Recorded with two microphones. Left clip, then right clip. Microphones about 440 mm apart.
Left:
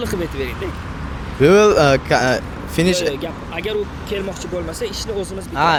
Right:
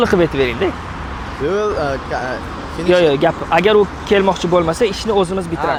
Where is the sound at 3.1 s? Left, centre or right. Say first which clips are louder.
Right 10 dB; right.